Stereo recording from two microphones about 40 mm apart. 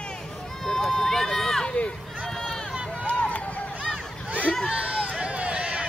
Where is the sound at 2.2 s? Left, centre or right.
Centre.